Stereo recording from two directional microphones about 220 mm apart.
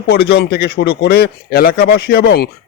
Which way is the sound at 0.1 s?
45° left (ahead or behind).